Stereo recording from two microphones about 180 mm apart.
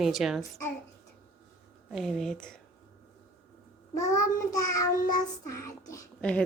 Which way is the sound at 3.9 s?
20° left (ahead or behind).